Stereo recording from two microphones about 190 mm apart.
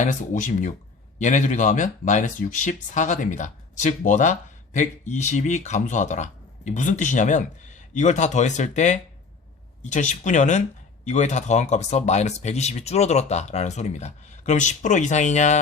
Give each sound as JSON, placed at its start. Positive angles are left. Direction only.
{"t": 0.0, "sound": "speech", "side_deg": 40}